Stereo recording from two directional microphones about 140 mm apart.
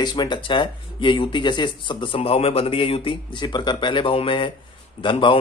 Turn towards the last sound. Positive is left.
turn(degrees=35)  # may be behind; listen again after turning